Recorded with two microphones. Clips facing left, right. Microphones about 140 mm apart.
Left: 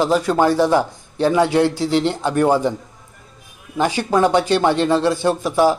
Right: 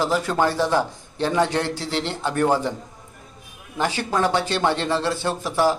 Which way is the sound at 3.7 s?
15° left (ahead or behind).